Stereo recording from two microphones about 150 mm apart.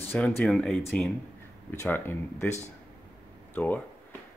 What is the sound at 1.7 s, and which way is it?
Speech, 15° left (ahead or behind).